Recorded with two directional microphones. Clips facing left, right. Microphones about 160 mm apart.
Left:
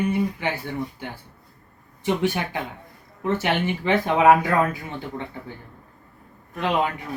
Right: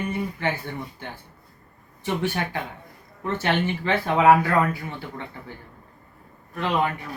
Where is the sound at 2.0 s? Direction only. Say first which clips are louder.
Left 3 dB; 15° left (ahead or behind).